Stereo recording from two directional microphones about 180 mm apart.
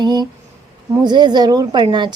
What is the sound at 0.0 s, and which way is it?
A woman's voice, 25° right (ahead or behind).